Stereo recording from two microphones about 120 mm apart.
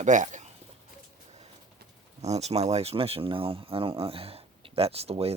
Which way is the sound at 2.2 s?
65° right (ahead or behind).